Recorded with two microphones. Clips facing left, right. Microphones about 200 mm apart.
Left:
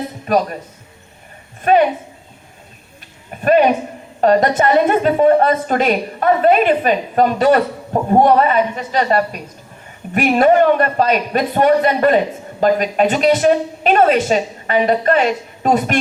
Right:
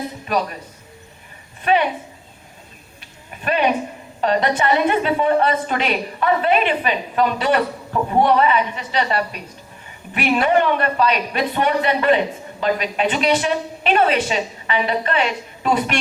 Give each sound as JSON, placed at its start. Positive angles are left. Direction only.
{"t": 0.3, "sound": "speech", "side_deg": 45}
{"t": 1.6, "sound": "speech", "side_deg": 45}
{"t": 3.4, "sound": "speech", "side_deg": 45}